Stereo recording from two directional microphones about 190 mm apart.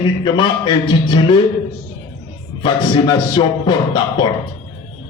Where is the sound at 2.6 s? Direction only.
25° left (ahead or behind).